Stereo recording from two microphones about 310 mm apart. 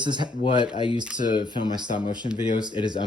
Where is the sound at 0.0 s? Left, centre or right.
Centre.